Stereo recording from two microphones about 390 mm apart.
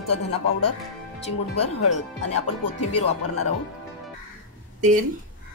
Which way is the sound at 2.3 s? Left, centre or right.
Left.